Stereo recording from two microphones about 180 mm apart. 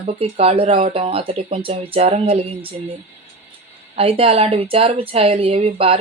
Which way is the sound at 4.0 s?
35° right (ahead or behind).